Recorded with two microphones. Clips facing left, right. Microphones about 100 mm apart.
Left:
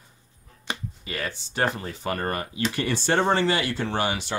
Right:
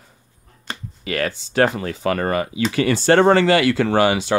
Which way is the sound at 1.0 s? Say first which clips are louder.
Right 9 dB; 90° right.